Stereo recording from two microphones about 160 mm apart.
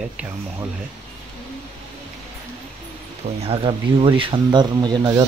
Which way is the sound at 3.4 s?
35° right (ahead or behind).